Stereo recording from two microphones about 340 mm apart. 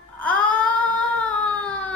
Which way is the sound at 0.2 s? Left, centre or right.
Centre.